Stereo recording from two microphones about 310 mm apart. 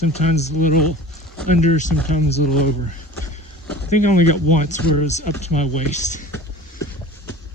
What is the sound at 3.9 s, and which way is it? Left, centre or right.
Speech, left.